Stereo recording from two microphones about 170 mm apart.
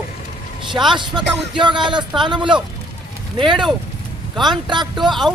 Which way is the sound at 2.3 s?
30° right (ahead or behind).